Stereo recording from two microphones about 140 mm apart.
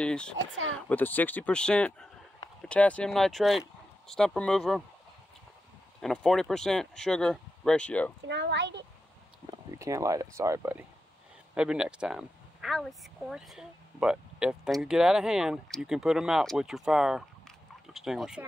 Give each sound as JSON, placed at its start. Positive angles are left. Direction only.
{"t": 0.0, "sound": "speech", "side_deg": 5}
{"t": 5.9, "sound": "speech", "side_deg": 5}
{"t": 9.7, "sound": "speech", "side_deg": -25}